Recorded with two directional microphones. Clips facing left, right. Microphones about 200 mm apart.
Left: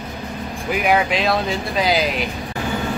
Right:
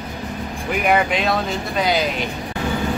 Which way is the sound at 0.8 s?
Centre (ahead or behind).